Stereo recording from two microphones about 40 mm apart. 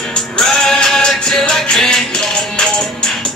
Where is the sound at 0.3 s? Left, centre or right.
Centre.